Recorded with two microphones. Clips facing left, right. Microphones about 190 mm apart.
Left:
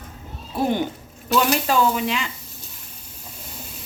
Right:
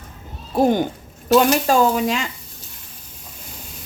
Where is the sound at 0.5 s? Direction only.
45° right (ahead or behind).